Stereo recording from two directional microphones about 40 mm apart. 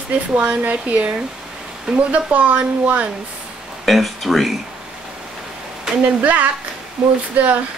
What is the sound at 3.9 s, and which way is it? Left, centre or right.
Speech, centre.